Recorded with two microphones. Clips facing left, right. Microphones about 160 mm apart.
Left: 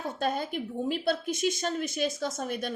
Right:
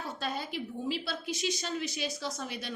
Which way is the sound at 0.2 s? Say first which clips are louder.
Left 7 dB; 50° left (ahead or behind).